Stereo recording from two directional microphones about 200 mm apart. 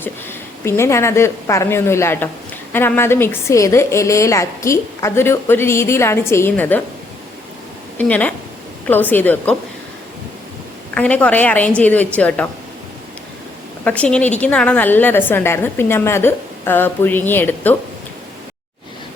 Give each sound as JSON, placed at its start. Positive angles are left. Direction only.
{"t": 0.0, "sound": "a woman's voice", "side_deg": 10}
{"t": 7.9, "sound": "a woman's voice", "side_deg": 5}
{"t": 10.9, "sound": "a woman's voice", "side_deg": 5}
{"t": 13.8, "sound": "a woman's voice", "side_deg": 5}